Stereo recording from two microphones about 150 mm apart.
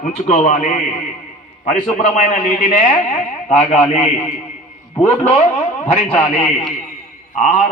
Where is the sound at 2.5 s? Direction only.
55° left (ahead or behind).